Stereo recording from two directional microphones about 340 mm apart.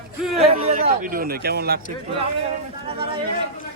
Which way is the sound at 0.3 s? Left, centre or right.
Centre.